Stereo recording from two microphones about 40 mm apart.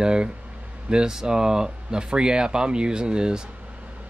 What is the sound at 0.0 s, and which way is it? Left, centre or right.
Speech, right.